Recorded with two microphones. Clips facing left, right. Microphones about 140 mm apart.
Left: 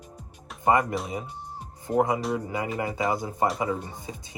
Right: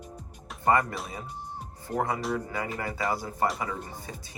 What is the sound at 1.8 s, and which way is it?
Speech, 20° left (ahead or behind).